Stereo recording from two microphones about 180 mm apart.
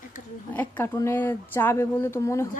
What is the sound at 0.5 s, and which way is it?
Speech, 10° left (ahead or behind).